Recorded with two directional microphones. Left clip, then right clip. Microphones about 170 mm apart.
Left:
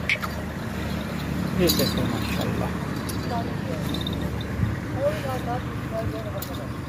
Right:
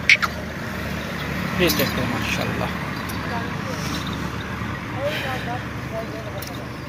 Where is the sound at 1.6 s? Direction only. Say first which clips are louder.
Right 2 dB; 30° right (ahead or behind).